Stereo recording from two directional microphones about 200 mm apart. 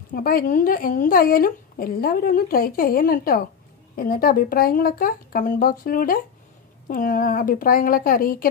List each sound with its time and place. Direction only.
0.1 s a woman's voice: 45° left (ahead or behind)